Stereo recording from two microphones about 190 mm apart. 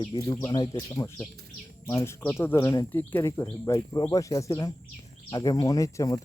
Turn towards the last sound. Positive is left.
turn(degrees=15)  # may be behind; listen again after turning